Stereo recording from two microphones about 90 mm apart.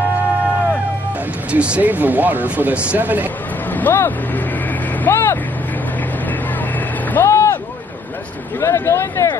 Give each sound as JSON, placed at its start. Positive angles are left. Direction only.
{"t": 1.5, "sound": "speech", "side_deg": -15}
{"t": 3.7, "sound": "speech", "side_deg": 20}
{"t": 5.0, "sound": "vehicle", "side_deg": 25}
{"t": 7.2, "sound": "a sound", "side_deg": 30}
{"t": 8.5, "sound": "speech", "side_deg": 30}